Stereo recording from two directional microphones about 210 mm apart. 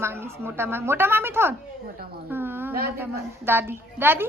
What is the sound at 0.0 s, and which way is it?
A woman's voice, 10° right (ahead or behind).